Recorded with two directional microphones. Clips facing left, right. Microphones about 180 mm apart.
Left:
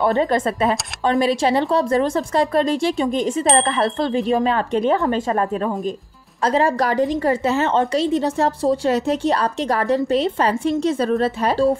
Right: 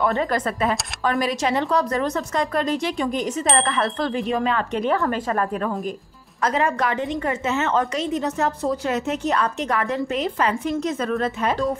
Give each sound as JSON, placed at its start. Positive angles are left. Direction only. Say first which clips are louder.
{"t": 0.0, "sound": "a woman's voice", "louder": "left 4 dB", "side_deg": 30}